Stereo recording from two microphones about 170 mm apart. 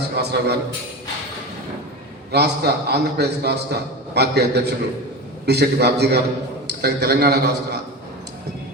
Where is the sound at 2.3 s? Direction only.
75° right (ahead or behind).